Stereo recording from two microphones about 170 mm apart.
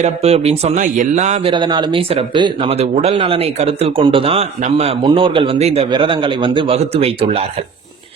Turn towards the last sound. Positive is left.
turn(degrees=-35)  # may be behind; listen again after turning